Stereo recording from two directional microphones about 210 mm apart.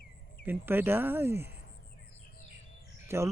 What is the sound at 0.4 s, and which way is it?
Speech, 10° right (ahead or behind).